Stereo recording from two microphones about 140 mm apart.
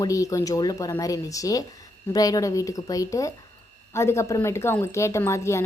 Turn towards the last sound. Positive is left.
turn(degrees=20)  # may be behind; listen again after turning